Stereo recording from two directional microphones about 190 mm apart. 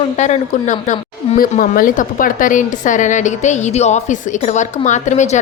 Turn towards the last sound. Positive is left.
turn(degrees=40)  # may be behind; listen again after turning